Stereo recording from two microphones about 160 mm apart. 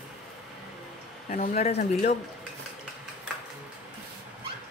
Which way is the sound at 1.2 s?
50° left (ahead or behind).